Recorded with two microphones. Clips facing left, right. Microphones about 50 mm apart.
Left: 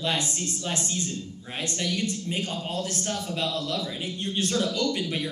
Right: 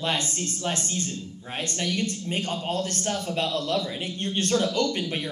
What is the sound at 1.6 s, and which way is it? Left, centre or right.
A woman's voice, right.